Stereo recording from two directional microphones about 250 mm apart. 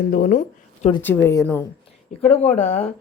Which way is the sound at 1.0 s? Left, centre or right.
Centre.